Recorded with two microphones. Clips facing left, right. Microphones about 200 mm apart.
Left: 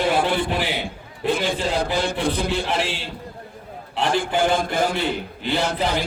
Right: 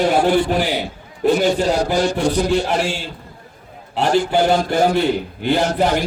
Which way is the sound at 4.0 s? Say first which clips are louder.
Right 5 dB; 45° right (ahead or behind).